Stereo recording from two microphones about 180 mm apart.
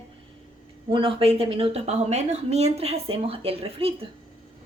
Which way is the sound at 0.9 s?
30° right (ahead or behind).